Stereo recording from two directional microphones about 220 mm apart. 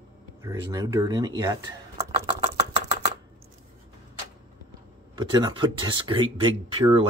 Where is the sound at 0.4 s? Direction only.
15° right (ahead or behind).